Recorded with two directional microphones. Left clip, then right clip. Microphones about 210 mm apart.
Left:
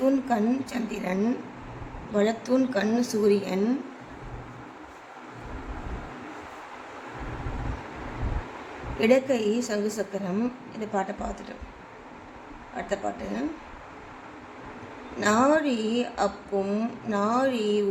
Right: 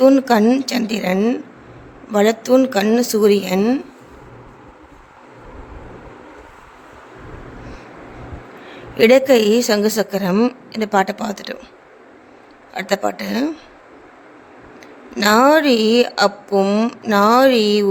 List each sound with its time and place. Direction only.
0.0 s speech: 40° right (ahead or behind)
9.0 s speech: 40° right (ahead or behind)
12.7 s speech: 40° right (ahead or behind)
15.2 s speech: 40° right (ahead or behind)